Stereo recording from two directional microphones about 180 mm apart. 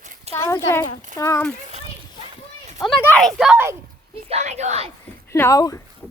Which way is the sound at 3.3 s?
5° right (ahead or behind).